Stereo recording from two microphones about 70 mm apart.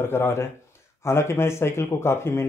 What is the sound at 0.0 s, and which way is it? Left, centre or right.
Speech, left.